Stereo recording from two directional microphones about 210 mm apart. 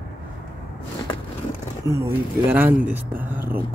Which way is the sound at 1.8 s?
15° right (ahead or behind).